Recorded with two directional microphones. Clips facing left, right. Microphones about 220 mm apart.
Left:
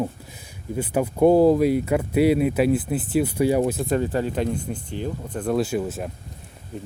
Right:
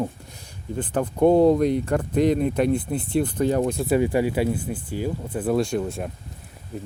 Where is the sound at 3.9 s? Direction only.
10° right (ahead or behind).